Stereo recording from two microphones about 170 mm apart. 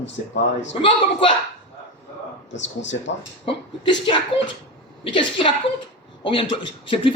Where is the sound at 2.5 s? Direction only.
90° left.